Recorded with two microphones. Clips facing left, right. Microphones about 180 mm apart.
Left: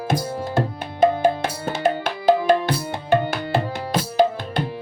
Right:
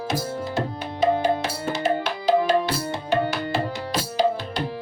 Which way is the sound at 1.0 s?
50° left (ahead or behind).